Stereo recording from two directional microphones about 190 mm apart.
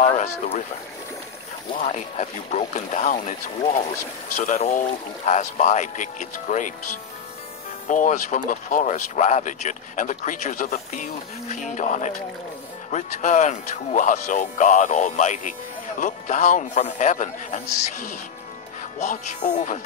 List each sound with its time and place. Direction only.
0.0 s speech: 35° left (ahead or behind)
1.8 s speech: 40° left (ahead or behind)
4.4 s speech: 40° left (ahead or behind)
7.9 s speech: 40° left (ahead or behind)
18.8 s speech: 40° left (ahead or behind)